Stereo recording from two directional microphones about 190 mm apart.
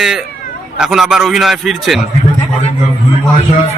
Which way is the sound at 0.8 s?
Centre (ahead or behind).